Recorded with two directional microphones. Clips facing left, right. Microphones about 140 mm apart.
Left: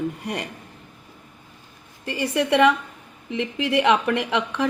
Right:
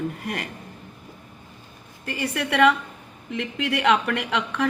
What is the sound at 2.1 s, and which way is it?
A woman's voice, 20° left (ahead or behind).